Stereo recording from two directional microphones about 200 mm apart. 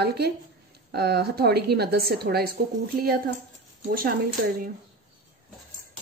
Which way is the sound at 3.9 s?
50° right (ahead or behind).